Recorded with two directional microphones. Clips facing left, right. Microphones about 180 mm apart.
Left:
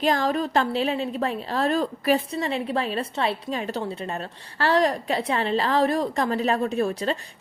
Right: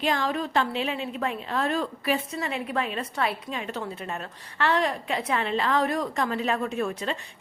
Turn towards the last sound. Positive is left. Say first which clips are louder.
# left 4 dB
turn(degrees=35)  # may be behind; listen again after turning